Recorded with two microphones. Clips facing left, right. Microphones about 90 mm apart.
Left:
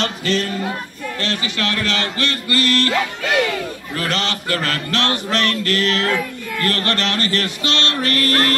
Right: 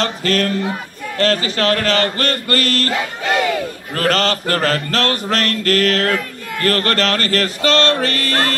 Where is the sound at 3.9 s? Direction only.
45° right (ahead or behind).